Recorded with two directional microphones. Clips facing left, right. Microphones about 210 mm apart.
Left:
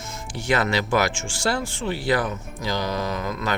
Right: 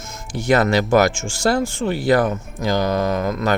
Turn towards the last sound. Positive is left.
turn(degrees=-45)  # may be behind; listen again after turning